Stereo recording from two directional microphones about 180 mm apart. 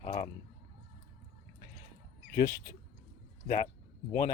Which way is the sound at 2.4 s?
60° left (ahead or behind).